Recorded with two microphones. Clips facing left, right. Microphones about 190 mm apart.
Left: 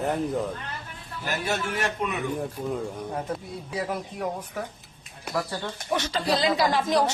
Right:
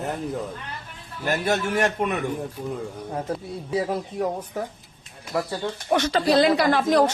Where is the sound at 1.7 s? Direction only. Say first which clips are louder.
Right 5 dB; 50° right (ahead or behind).